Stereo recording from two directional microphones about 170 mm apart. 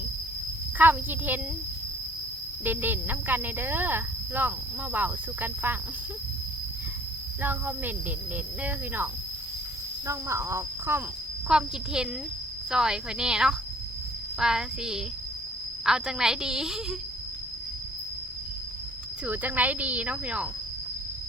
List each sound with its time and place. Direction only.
0.8 s speech: 10° right (ahead or behind)
2.6 s speech: 10° right (ahead or behind)
7.4 s speech: 10° right (ahead or behind)
10.1 s a woman's voice: 15° right (ahead or behind)
19.2 s speech: 10° right (ahead or behind)